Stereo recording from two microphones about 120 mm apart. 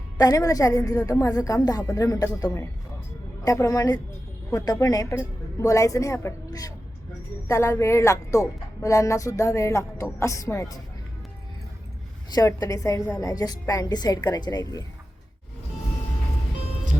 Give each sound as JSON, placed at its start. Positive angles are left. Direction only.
{"t": 0.2, "sound": "speech", "side_deg": 30}
{"t": 12.3, "sound": "a woman's voice", "side_deg": 30}